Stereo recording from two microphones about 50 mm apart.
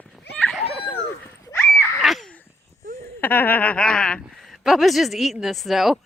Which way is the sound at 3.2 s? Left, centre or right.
Left.